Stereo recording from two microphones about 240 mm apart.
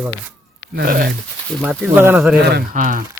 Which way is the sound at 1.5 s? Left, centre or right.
Centre.